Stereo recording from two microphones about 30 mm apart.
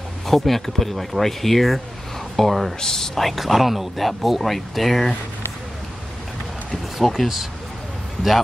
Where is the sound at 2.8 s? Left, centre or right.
Centre.